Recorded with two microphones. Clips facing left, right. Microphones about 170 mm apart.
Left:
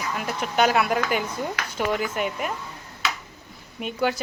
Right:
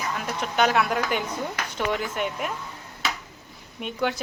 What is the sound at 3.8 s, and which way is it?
Speech, 5° left (ahead or behind).